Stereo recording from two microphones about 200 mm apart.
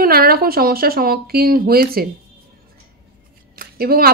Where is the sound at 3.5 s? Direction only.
50° right (ahead or behind).